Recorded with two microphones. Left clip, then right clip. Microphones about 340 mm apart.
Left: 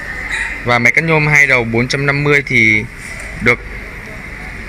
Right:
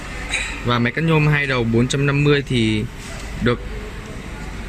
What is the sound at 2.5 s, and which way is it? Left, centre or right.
Speech, centre.